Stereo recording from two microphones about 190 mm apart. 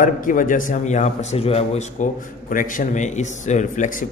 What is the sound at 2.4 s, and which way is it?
A man's voice, 45° left (ahead or behind).